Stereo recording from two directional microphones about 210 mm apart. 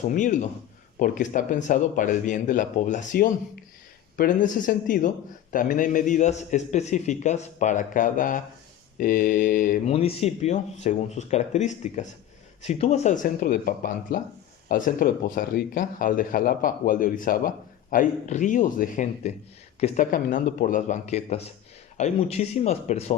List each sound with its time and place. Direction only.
0.1 s speech: 35° left (ahead or behind)
9.9 s speech: 30° left (ahead or behind)